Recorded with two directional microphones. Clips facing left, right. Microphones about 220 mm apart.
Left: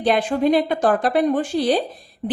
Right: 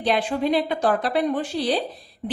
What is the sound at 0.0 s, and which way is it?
A woman's voice, 50° left (ahead or behind).